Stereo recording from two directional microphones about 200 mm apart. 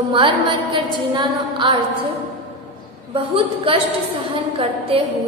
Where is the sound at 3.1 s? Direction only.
25° right (ahead or behind).